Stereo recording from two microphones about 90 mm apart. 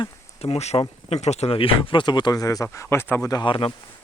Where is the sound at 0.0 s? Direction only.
90° left; by 2.6 s 40° left (ahead or behind).